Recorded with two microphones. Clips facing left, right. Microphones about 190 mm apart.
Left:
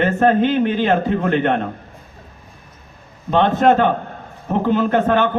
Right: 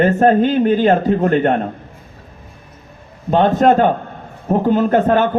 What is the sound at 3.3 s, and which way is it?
A man's voice, 45° right (ahead or behind).